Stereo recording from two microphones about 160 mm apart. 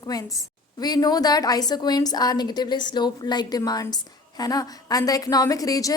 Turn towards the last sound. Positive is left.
turn(degrees=20)  # may be behind; listen again after turning